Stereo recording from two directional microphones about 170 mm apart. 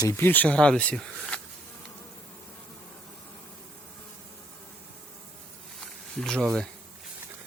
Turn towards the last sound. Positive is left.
turn(degrees=5)  # may be behind; listen again after turning